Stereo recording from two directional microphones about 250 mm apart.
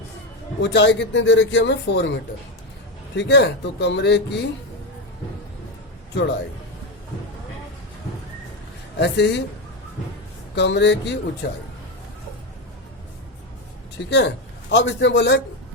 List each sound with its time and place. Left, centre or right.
0.6 s a man's voice: left
3.2 s a man's voice: left
9.0 s a man's voice: left
10.5 s a man's voice: left
14.1 s a man's voice: left